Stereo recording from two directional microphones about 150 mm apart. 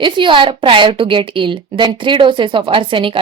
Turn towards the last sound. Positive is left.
turn(degrees=-35)  # may be behind; listen again after turning